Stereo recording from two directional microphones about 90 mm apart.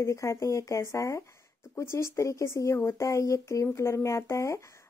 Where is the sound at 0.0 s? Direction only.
35° left (ahead or behind).